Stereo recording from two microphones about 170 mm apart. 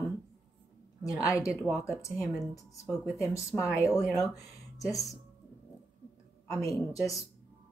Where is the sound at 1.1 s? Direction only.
20° left (ahead or behind).